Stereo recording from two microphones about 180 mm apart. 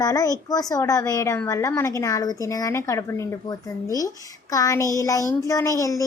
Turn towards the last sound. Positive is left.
turn(degrees=20)  # may be behind; listen again after turning